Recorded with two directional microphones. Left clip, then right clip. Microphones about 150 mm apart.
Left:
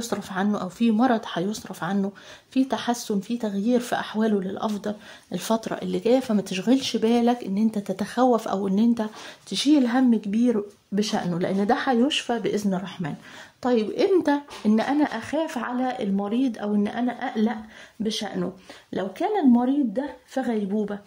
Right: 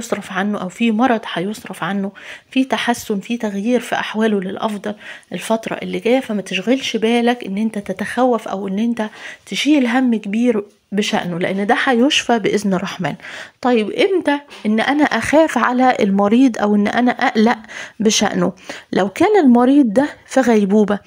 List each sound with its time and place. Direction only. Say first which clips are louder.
0.1 s speech: right 7 dB; 5° right (ahead or behind)
11.2 s speech: right 6 dB; centre (ahead or behind); by 13.1 s 30° right (ahead or behind)
13.6 s speech: right 7 dB; 15° right (ahead or behind)
14.1 s speech: right 4 dB; centre (ahead or behind)
14.9 s speech: right 10 dB; 25° right (ahead or behind)
18.0 s speech: right 13 dB; 45° right (ahead or behind)
18.4 s speech: right 12 dB; 25° right (ahead or behind); by 21.0 s 45° right (ahead or behind)